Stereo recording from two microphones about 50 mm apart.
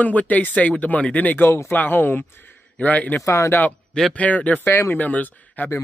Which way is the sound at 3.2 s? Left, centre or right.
Left.